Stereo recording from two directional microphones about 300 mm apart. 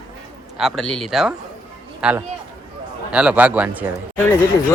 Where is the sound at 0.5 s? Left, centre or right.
Centre.